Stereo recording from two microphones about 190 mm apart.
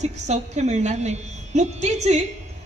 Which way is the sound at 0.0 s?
35° right (ahead or behind).